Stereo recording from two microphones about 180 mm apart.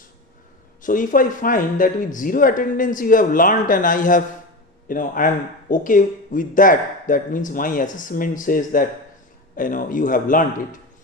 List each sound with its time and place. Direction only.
0.8 s speech: 50° left (ahead or behind)